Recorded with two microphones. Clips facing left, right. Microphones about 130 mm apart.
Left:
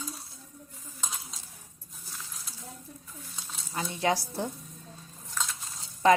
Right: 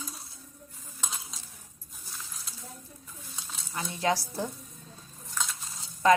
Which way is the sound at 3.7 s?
25° left (ahead or behind).